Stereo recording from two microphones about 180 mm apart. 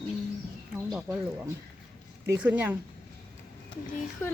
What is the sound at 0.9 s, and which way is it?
Speech, 5° right (ahead or behind).